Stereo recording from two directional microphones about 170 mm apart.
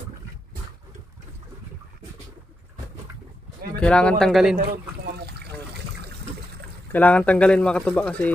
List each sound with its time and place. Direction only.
3.8 s speech: 5° left (ahead or behind)
4.6 s a sound: 75° right (ahead or behind)
6.9 s speech: 10° left (ahead or behind)